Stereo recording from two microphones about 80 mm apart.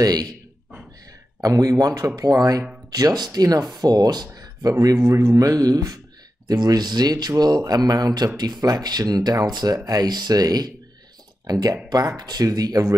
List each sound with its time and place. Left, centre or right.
0.0 s speech: right
1.4 s speech: right